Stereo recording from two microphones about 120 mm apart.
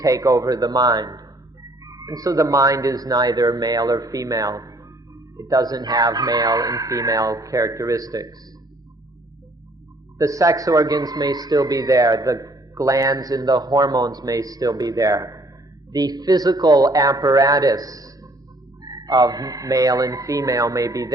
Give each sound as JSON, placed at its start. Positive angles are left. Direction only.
{"t": 0.0, "sound": "a man's voice", "side_deg": -30}
{"t": 10.2, "sound": "a man's voice", "side_deg": -25}